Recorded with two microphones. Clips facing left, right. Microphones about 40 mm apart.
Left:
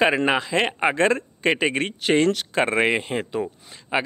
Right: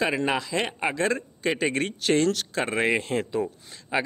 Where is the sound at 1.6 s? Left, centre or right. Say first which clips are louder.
Left 3 dB; left.